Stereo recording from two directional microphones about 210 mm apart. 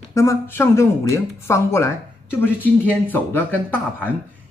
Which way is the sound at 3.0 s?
10° left (ahead or behind).